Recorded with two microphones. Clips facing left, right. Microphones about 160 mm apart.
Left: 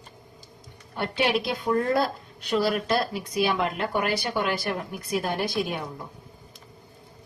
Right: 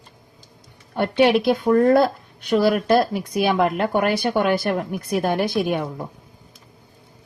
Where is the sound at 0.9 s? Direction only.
55° right (ahead or behind).